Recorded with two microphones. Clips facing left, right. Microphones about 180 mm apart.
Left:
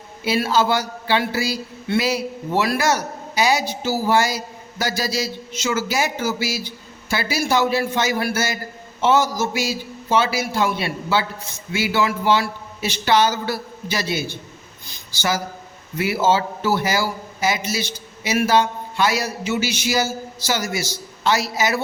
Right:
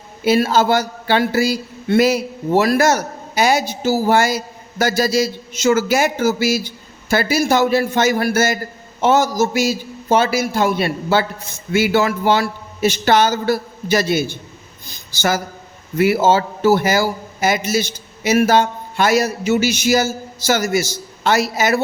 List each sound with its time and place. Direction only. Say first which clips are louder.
0.3 s a man's voice: right 5 dB; 45° right (ahead or behind)